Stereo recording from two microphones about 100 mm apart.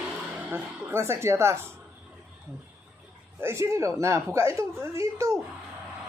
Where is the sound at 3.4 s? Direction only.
30° right (ahead or behind).